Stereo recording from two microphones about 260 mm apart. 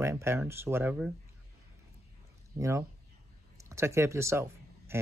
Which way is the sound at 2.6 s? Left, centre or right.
Centre.